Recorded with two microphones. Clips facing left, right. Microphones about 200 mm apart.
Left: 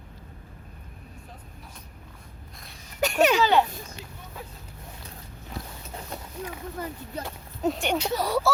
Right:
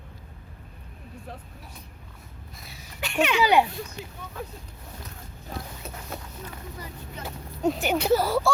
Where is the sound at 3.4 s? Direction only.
15° right (ahead or behind).